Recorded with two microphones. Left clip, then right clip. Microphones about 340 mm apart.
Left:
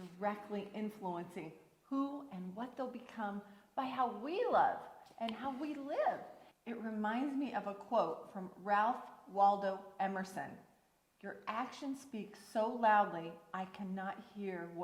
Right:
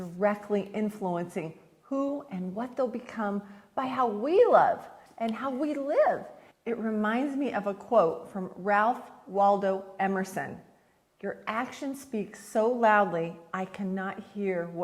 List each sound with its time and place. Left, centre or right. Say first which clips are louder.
0.2 s a woman's voice: right 13 dB; right
1.9 s a woman's voice: right 10 dB; right